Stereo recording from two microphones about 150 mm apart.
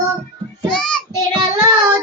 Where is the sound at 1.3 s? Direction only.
25° right (ahead or behind).